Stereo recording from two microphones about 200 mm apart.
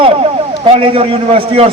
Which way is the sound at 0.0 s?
30° right (ahead or behind).